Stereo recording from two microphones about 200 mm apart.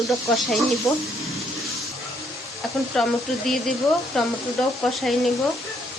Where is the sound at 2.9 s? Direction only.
Centre (ahead or behind).